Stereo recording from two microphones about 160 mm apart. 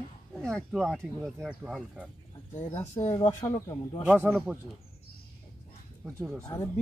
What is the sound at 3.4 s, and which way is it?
Speech, 20° left (ahead or behind).